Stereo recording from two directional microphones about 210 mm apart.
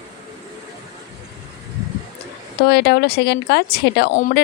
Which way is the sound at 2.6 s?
55° left (ahead or behind).